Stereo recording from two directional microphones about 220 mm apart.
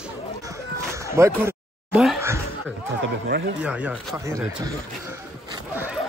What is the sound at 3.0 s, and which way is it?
Speech, 50° right (ahead or behind).